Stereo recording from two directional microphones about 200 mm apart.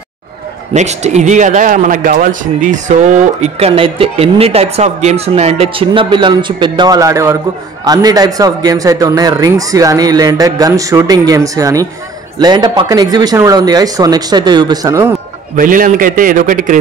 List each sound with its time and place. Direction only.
0.7 s a man's voice: 35° right (ahead or behind); by 15.1 s 15° right (ahead or behind)
15.5 s a man's voice: 45° right (ahead or behind)